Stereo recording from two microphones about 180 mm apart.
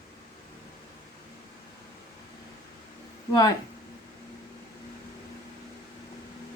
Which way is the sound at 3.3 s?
20° left (ahead or behind).